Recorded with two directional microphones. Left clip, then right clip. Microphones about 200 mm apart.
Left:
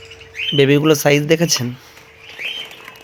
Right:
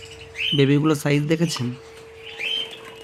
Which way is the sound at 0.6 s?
Centre (ahead or behind).